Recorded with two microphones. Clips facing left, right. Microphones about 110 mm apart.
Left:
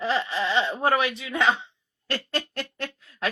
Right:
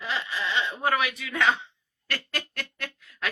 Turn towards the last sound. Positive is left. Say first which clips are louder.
# left 4 dB
turn(degrees=30)  # may be behind; listen again after turning